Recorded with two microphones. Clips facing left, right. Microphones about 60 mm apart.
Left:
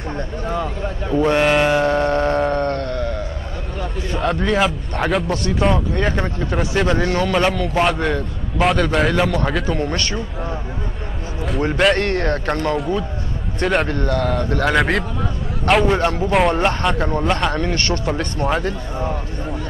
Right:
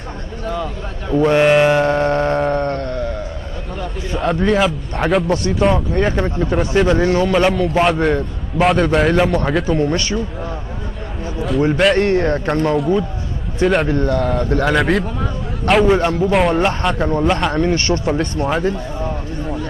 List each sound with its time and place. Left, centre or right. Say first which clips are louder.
1.2 s a man's voice: right 4 dB; centre
1.7 s civil defense siren: right 2 dB; right
2.6 s sheep: even; right
4.2 s a man's voice: right 3 dB; centre
7.0 s civil defense siren: right 4 dB; centre
7.3 s a man's voice: right 3 dB; centre
11.4 s a man's voice: right 2 dB; centre
12.0 s civil defense siren: right 4 dB; right
13.6 s a man's voice: right 3 dB; centre
13.9 s civil defense siren: right 3 dB; right
14.2 s a man's voice: right 2 dB; centre
17.6 s a man's voice: right 4 dB; centre
18.1 s a man's voice: right 2 dB; centre